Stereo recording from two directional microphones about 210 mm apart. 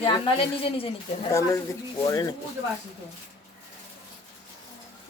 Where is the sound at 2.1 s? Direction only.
15° left (ahead or behind).